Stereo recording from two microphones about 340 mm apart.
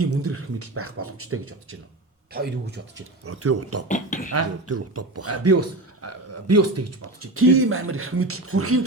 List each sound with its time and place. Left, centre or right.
0.0 s speech: right
2.3 s speech: right
3.2 s speech: right
3.8 s speech: left
4.3 s speech: right